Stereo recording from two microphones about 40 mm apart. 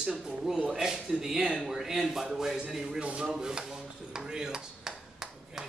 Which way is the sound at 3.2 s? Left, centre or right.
Centre.